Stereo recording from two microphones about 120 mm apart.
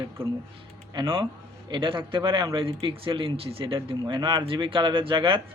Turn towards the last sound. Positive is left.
turn(degrees=-45)  # may be behind; listen again after turning